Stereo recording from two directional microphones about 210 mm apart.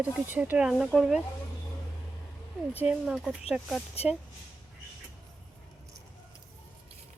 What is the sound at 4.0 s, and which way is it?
Speech, 30° left (ahead or behind).